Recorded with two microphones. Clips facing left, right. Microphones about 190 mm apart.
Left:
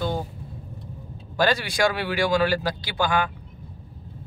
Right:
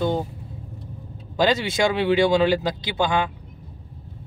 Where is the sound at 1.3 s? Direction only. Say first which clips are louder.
Right 2 dB; 20° right (ahead or behind).